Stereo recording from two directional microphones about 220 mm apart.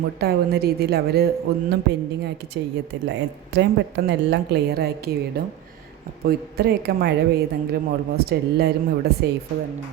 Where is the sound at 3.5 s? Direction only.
50° right (ahead or behind).